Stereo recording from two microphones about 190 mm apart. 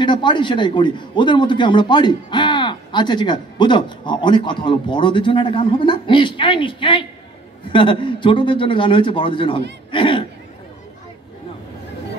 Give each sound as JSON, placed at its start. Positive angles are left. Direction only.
{"t": 0.0, "sound": "a man's voice", "side_deg": 25}